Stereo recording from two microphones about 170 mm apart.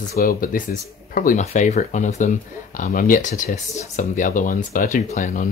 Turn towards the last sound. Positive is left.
turn(degrees=50)  # may be behind; listen again after turning